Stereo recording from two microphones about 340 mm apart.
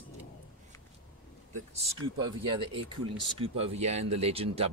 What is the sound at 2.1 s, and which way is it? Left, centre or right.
Speech, centre.